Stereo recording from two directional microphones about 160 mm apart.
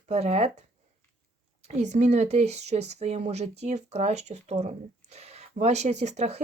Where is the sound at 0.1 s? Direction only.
40° right (ahead or behind).